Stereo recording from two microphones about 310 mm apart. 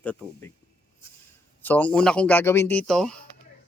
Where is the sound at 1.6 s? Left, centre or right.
Centre.